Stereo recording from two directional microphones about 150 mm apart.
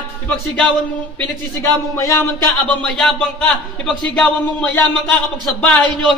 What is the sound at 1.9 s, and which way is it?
A man's voice, 20° left (ahead or behind).